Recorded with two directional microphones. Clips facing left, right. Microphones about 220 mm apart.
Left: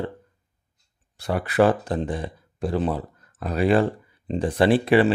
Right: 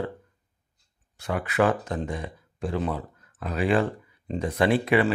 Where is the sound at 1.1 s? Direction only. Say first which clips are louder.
Left 4 dB; 35° left (ahead or behind).